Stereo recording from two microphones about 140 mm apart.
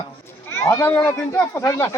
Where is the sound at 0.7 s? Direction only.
15° left (ahead or behind).